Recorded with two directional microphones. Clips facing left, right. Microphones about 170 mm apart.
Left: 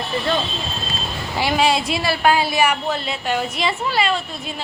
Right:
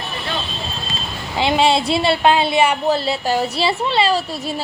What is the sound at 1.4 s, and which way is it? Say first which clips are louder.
A woman's voice: right 3 dB; 25° right (ahead or behind).